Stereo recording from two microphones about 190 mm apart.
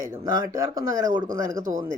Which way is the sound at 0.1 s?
20° right (ahead or behind).